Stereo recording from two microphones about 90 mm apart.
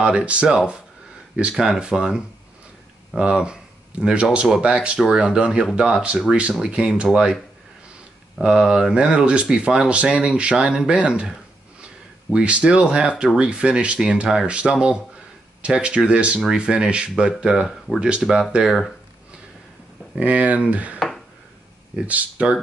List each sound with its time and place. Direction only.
0.0 s speech: 15° right (ahead or behind)
8.4 s speech: 5° right (ahead or behind)
20.2 s speech: 15° right (ahead or behind)